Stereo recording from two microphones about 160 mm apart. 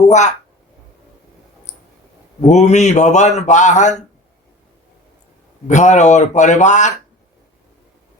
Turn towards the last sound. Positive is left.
turn(degrees=50)  # may be behind; listen again after turning